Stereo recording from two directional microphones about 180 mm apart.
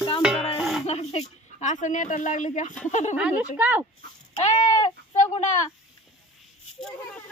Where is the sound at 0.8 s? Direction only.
35° left (ahead or behind).